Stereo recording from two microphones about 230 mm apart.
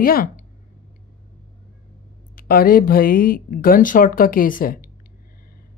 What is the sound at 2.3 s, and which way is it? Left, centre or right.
Speech, left.